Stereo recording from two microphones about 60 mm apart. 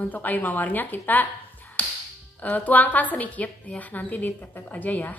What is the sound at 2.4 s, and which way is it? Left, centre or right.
A woman's voice, left.